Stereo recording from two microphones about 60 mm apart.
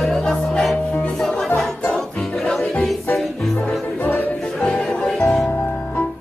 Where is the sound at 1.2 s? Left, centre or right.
Centre.